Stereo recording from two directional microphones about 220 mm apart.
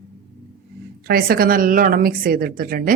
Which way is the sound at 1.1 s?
45° right (ahead or behind).